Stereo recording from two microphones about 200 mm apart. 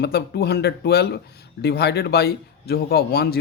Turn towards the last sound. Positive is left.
turn(degrees=50)  # may be behind; listen again after turning